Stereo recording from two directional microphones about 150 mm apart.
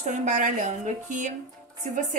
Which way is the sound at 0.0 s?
55° right (ahead or behind).